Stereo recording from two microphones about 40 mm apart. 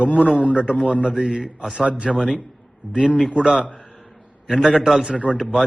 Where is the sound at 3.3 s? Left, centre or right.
Centre.